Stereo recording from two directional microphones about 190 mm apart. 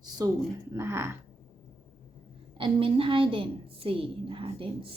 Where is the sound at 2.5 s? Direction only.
25° right (ahead or behind).